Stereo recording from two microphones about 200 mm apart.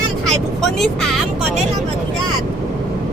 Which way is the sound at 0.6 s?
Centre (ahead or behind).